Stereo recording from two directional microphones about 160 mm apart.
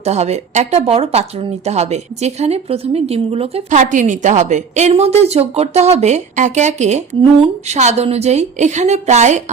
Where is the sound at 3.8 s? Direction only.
50° right (ahead or behind).